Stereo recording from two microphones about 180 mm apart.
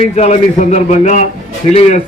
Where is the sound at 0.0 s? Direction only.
40° left (ahead or behind).